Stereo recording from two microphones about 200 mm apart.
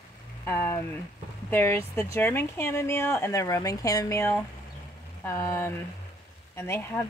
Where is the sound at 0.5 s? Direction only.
10° left (ahead or behind).